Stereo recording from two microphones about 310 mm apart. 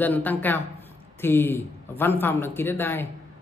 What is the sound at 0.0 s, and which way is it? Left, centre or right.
A woman's voice, centre.